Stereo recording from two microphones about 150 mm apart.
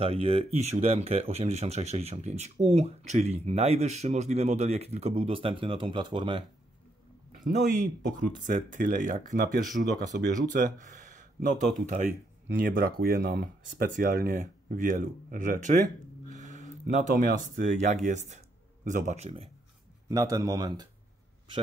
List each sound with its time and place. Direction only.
0.0 s speech: 40° right (ahead or behind)
7.4 s speech: 60° right (ahead or behind)
9.6 s speech: centre (ahead or behind)
9.9 s speech: 60° right (ahead or behind)
12.5 s speech: 75° right (ahead or behind); by 19.5 s 40° right (ahead or behind)
20.1 s speech: 25° right (ahead or behind)